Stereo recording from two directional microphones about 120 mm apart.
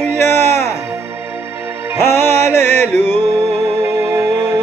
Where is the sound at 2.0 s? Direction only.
20° left (ahead or behind).